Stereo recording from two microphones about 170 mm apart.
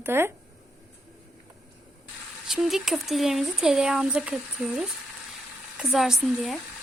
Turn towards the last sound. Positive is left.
turn(degrees=0)  # may be behind; listen again after turning